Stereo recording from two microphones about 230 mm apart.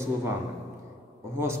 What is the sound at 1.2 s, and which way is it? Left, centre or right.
Speech, centre.